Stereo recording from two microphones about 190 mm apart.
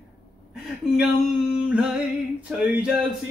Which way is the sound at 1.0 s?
Centre (ahead or behind).